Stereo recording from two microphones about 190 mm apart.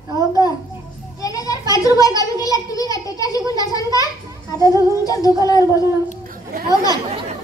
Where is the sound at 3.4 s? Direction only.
20° right (ahead or behind).